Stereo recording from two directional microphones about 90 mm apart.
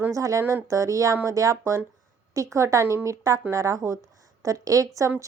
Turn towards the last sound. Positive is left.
turn(degrees=-35)  # may be behind; listen again after turning